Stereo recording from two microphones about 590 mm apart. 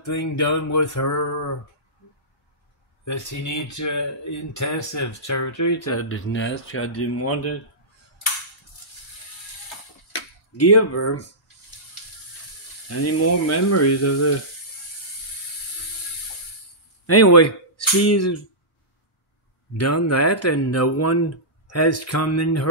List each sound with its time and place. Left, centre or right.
0.2 s speech: left
3.1 s speech: left
10.6 s speech: left
13.0 s speech: left
17.0 s speech: left
19.8 s speech: left